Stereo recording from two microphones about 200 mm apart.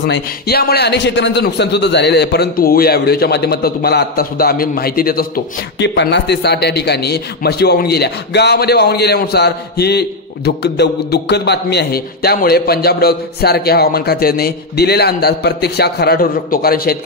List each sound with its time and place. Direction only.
0.0 s a man's voice: 55° left (ahead or behind)
5.8 s a man's voice: 60° left (ahead or behind)